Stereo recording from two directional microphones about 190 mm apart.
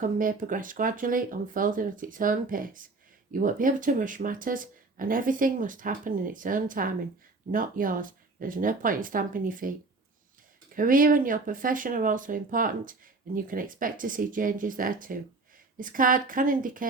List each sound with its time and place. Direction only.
0.0 s speech: 45° right (ahead or behind)
10.8 s speech: 45° right (ahead or behind)